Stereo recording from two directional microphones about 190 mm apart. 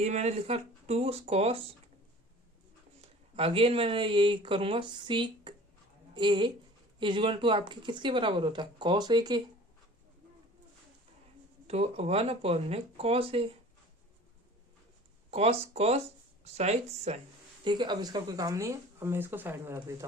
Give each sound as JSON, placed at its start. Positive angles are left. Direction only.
{"t": 0.0, "sound": "speech", "side_deg": -35}
{"t": 3.0, "sound": "speech", "side_deg": -30}
{"t": 11.7, "sound": "speech", "side_deg": -35}
{"t": 15.3, "sound": "speech", "side_deg": -35}
{"t": 17.6, "sound": "speech", "side_deg": -25}